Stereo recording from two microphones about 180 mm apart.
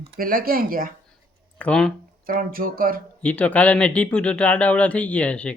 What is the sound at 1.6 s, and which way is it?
Speech, 5° left (ahead or behind).